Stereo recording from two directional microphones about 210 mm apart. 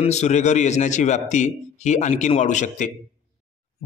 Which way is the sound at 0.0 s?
35° left (ahead or behind).